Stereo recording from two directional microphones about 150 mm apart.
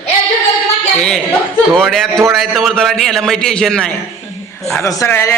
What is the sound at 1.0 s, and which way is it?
A man's voice, 5° left (ahead or behind).